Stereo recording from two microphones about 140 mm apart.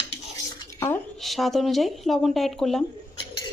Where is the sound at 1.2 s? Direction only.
Centre (ahead or behind).